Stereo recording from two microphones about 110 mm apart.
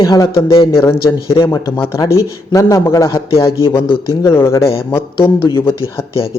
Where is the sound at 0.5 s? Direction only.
50° left (ahead or behind).